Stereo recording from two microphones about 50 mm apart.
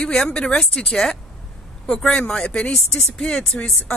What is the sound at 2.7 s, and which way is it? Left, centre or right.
Speech, centre.